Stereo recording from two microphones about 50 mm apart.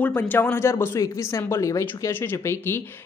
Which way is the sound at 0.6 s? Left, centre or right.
Left.